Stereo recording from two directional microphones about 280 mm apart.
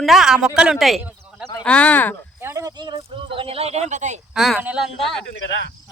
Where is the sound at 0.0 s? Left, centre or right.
Centre.